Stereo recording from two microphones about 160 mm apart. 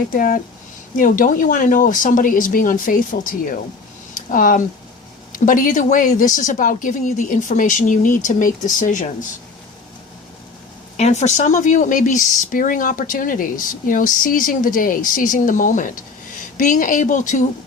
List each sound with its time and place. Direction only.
0.1 s speech: 60° left (ahead or behind)
10.9 s speech: 45° left (ahead or behind)